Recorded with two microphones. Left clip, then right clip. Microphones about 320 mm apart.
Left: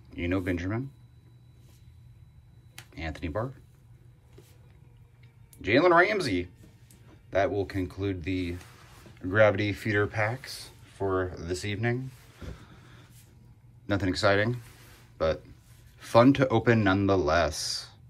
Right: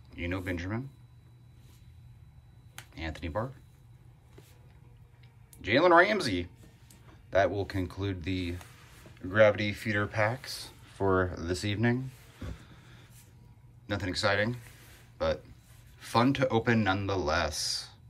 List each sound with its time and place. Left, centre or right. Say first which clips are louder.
0.1 s speech: left 5 dB; centre
2.9 s speech: left 2 dB; centre
5.6 s speech: left 1 dB; centre
12.6 s a sound: left 2 dB; centre
13.8 s speech: left 4 dB; centre